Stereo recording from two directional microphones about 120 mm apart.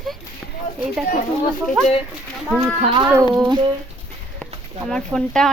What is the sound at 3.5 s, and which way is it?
Speech, 40° right (ahead or behind).